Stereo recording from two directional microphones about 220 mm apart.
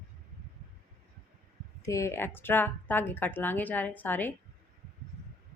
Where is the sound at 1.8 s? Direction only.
15° left (ahead or behind).